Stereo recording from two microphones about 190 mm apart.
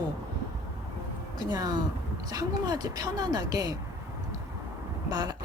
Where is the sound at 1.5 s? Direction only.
20° right (ahead or behind).